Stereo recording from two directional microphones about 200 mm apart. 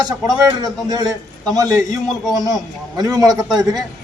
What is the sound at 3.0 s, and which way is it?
Speech, 20° right (ahead or behind).